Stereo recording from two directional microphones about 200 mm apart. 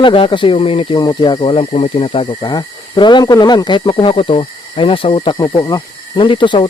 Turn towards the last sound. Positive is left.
turn(degrees=25)  # may be behind; listen again after turning